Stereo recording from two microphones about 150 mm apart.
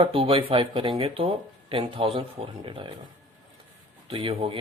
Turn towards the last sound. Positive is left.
turn(degrees=-35)  # may be behind; listen again after turning